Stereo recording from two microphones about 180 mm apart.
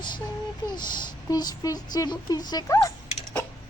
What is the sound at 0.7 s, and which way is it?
Speech, 25° left (ahead or behind).